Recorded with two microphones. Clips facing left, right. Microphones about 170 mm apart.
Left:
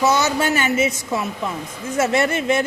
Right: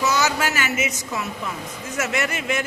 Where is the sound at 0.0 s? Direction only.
30° left (ahead or behind).